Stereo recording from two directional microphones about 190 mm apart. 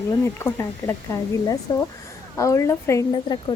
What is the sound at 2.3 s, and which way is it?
Speech, 15° left (ahead or behind).